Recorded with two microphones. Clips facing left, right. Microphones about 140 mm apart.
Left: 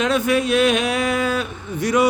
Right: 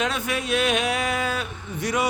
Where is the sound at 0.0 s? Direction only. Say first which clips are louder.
Left 8 dB; 90° left.